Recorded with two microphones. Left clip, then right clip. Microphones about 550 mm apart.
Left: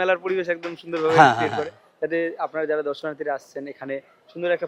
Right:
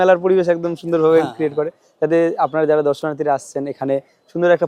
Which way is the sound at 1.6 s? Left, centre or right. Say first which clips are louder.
Right 8 dB; right.